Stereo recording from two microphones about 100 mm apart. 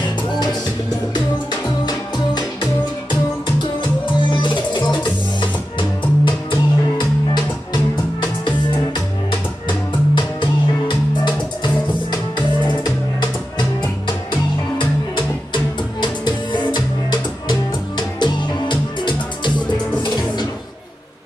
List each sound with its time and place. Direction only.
0.3 s music: 45° left (ahead or behind)
4.0 s music: 55° left (ahead or behind)